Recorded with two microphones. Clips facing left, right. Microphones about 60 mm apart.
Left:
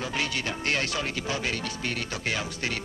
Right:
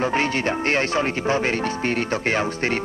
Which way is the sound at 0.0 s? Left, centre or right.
Right.